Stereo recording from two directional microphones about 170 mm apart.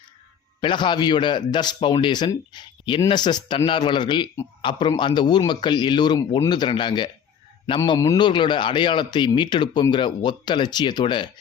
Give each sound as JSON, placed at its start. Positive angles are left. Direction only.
{"t": 0.6, "sound": "a man's voice", "side_deg": 25}